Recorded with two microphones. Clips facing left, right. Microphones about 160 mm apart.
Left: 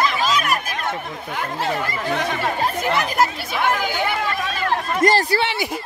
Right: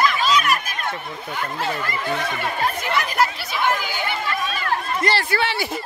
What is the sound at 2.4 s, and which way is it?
Speech, 40° left (ahead or behind).